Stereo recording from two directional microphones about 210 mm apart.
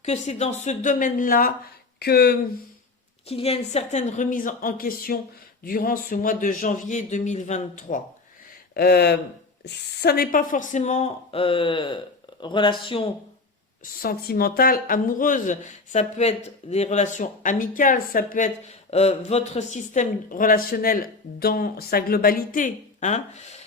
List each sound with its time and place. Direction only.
0.0 s speech: 30° left (ahead or behind); by 2.4 s 50° left (ahead or behind)
3.2 s speech: 30° left (ahead or behind)
8.7 s speech: 50° left (ahead or behind); by 13.1 s 25° left (ahead or behind)
13.8 s speech: 45° left (ahead or behind)